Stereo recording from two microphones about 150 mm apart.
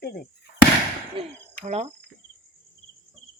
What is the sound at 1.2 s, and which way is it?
Speech, 35° right (ahead or behind).